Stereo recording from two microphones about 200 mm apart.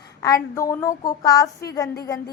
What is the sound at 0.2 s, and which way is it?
A woman's voice, 15° left (ahead or behind).